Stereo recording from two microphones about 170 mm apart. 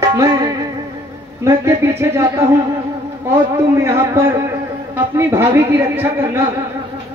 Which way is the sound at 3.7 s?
15° right (ahead or behind).